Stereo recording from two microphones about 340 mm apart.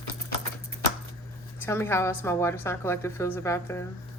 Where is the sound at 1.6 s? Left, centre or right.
Centre.